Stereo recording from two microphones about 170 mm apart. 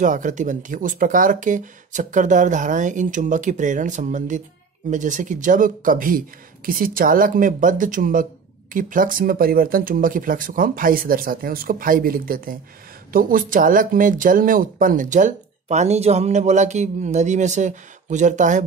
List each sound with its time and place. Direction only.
0.0 s speech: 50° right (ahead or behind)